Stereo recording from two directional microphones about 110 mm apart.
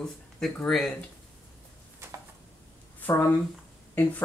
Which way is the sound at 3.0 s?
15° left (ahead or behind).